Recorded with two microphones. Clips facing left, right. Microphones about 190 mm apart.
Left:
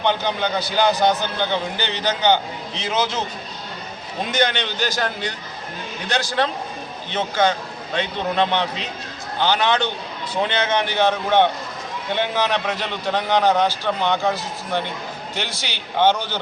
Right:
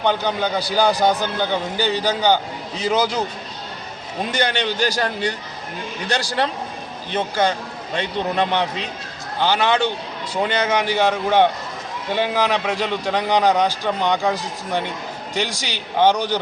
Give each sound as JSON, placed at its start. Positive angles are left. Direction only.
{"t": 0.0, "sound": "a man's voice", "side_deg": -10}
{"t": 4.3, "sound": "a man's voice", "side_deg": -10}